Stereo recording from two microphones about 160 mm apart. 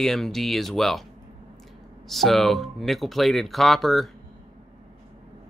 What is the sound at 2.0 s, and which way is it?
Speech, centre (ahead or behind).